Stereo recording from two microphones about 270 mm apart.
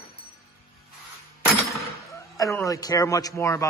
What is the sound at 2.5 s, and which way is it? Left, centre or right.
A man's voice, centre.